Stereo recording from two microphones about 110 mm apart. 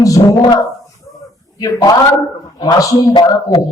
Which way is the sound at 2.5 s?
30° left (ahead or behind).